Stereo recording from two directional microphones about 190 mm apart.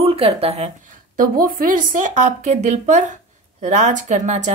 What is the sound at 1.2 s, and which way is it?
A woman's voice, 50° right (ahead or behind).